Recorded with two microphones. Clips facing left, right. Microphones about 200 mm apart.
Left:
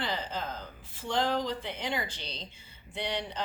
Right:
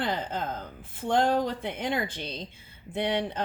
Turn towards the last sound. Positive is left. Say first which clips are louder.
# right 7 dB
turn(degrees=-55)  # may be behind; listen again after turning